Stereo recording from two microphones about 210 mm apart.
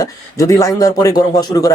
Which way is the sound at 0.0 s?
15° left (ahead or behind).